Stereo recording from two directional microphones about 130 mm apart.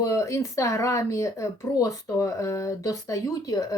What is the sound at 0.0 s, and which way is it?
Speech, 25° left (ahead or behind).